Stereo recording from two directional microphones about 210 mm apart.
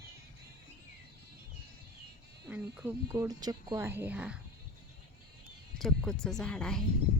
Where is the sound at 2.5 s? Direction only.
10° right (ahead or behind).